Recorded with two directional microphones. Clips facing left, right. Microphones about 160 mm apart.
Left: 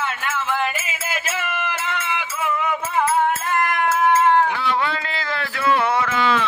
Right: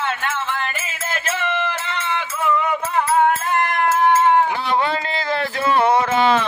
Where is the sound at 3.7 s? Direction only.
Centre (ahead or behind).